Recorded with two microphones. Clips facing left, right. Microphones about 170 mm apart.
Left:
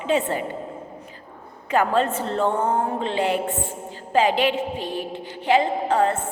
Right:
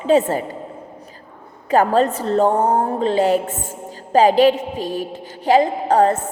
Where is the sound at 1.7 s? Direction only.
40° right (ahead or behind).